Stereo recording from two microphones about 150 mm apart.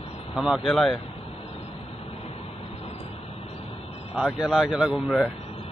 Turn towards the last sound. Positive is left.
turn(degrees=-5)  # may be behind; listen again after turning